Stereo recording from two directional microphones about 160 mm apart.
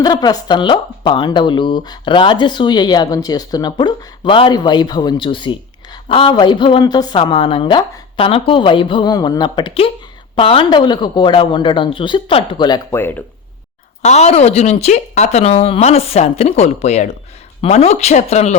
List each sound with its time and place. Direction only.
0.0 s speech: 25° left (ahead or behind)
12.9 s speech: 15° left (ahead or behind)
14.0 s speech: 45° left (ahead or behind)